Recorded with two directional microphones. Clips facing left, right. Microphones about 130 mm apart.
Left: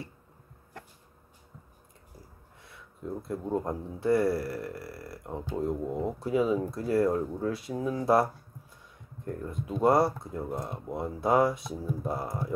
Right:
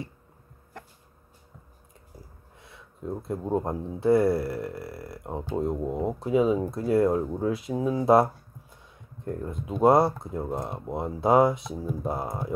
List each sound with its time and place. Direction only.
2.6 s speech: 25° right (ahead or behind)
9.3 s speech: 20° right (ahead or behind)